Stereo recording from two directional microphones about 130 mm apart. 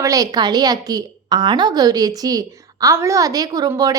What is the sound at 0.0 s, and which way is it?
A woman's voice, 30° right (ahead or behind).